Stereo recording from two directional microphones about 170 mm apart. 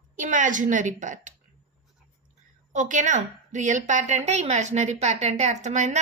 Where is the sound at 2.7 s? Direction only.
45° right (ahead or behind).